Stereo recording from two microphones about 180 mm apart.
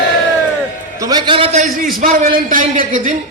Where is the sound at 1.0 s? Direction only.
20° right (ahead or behind).